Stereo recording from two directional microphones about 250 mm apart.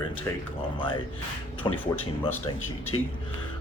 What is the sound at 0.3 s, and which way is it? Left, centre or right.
Speech, centre.